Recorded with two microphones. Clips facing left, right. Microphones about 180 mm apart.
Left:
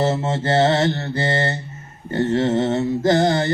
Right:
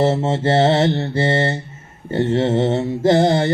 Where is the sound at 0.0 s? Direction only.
25° right (ahead or behind).